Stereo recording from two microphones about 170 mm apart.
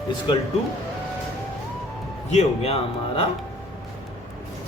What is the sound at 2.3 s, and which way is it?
Speech, 40° left (ahead or behind).